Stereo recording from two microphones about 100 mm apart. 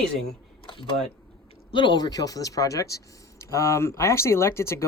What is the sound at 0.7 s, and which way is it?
Speech, 55° left (ahead or behind).